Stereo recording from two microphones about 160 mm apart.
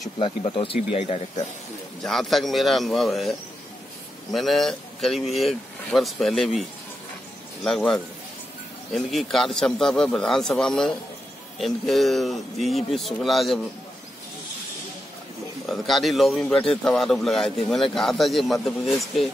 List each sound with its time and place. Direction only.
0.2 s speech: 30° left (ahead or behind)
2.0 s speech: centre (ahead or behind)
7.6 s speech: centre (ahead or behind)
15.6 s speech: centre (ahead or behind)